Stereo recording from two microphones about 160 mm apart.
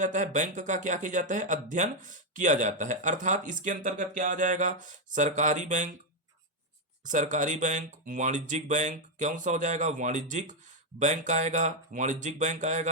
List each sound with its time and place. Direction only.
0.0 s speech: 50° right (ahead or behind)
7.0 s speech: 50° right (ahead or behind)